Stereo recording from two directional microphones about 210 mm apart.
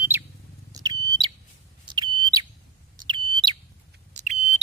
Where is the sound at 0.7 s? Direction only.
20° right (ahead or behind).